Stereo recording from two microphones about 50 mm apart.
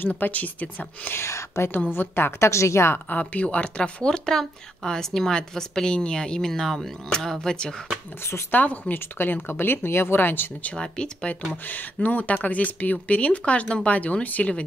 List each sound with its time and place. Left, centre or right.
0.0 s speech: left
1.1 s speech: left
2.0 s speech: left
2.5 s speech: left
3.1 s speech: left
8.2 s speech: left
8.5 s speech: left
8.9 s speech: left
10.6 s speech: left
11.5 s speech: left